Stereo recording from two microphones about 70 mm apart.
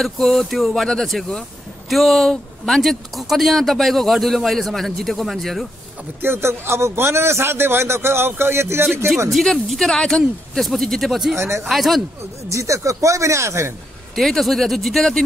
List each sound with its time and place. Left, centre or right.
0.0 s speech: centre
6.2 s a man's voice: right
9.3 s speech: centre
11.3 s a man's voice: right
11.7 s speech: centre
12.4 s speech: right
14.1 s speech: centre